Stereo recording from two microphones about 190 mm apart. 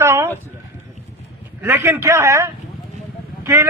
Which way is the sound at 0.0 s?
15° right (ahead or behind).